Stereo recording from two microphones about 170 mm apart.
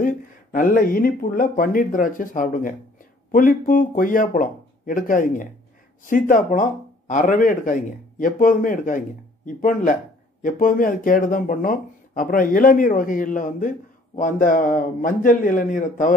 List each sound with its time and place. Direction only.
0.0 s a man's voice: 50° left (ahead or behind)